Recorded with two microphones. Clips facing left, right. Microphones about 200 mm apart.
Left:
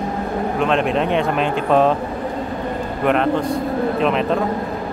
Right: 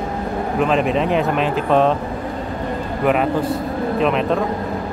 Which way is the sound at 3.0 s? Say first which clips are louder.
Even; 5° right (ahead or behind).